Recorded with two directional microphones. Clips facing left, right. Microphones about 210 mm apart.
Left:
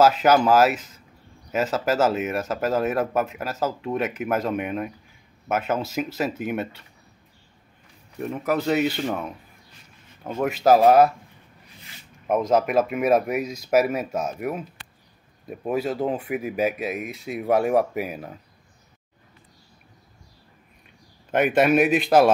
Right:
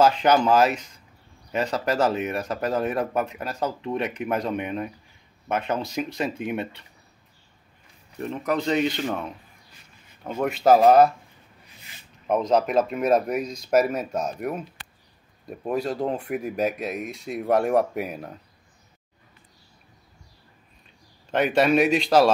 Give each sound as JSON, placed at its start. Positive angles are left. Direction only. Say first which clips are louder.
{"t": 0.0, "sound": "speech", "louder": "left 2 dB", "side_deg": 5}
{"t": 8.2, "sound": "speech", "louder": "left 1 dB", "side_deg": 5}
{"t": 10.4, "sound": "speech", "louder": "even", "side_deg": 5}
{"t": 12.3, "sound": "speech", "louder": "left 1 dB", "side_deg": 5}
{"t": 21.6, "sound": "speech", "louder": "left 1 dB", "side_deg": 5}
{"t": 21.9, "sound": "a man's voice", "louder": "left 1 dB", "side_deg": 55}